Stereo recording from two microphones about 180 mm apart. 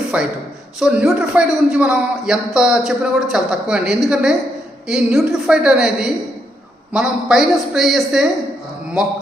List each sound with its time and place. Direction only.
0.1 s a man's voice: 5° right (ahead or behind)